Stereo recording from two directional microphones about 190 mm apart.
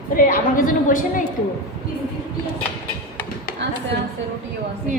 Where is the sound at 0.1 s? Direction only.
45° left (ahead or behind).